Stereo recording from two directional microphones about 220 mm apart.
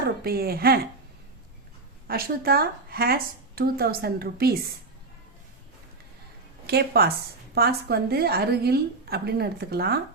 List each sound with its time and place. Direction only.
0.3 s speech: 45° right (ahead or behind)
2.0 s speech: 45° right (ahead or behind)
6.7 s speech: 45° right (ahead or behind)